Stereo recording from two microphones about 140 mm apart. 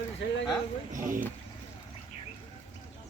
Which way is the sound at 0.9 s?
70° right (ahead or behind).